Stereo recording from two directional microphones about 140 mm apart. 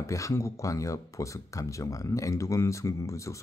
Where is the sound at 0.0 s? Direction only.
20° left (ahead or behind).